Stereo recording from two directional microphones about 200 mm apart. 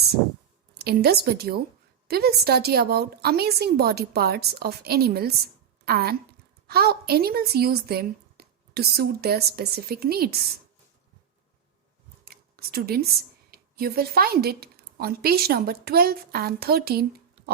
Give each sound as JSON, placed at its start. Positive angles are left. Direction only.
{"t": 0.7, "sound": "a woman's voice", "side_deg": -50}
{"t": 12.2, "sound": "a sound", "side_deg": -50}
{"t": 13.5, "sound": "a woman's voice", "side_deg": -50}